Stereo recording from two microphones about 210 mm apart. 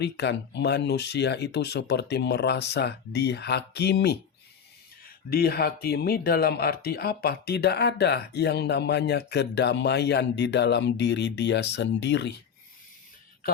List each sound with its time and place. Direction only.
0.0 s speech: 55° left (ahead or behind)